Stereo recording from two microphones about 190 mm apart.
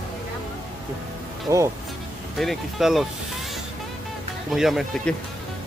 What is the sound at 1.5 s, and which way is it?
Speech, 15° right (ahead or behind).